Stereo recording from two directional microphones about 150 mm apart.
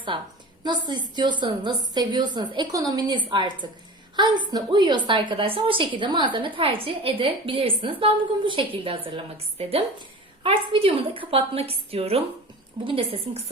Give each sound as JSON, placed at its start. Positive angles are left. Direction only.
{"t": 0.1, "sound": "a woman's voice", "side_deg": -35}